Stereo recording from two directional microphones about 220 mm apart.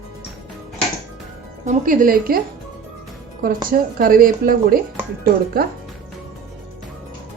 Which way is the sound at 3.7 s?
40° right (ahead or behind).